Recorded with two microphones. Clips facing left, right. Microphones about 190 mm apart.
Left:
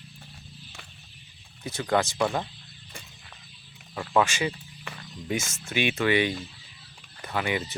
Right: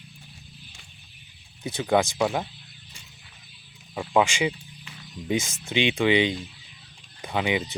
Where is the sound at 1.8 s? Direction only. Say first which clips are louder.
Right 3 dB; 10° right (ahead or behind).